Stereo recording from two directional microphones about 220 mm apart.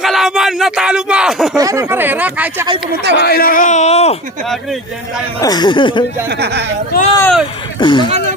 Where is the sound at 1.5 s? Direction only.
15° right (ahead or behind).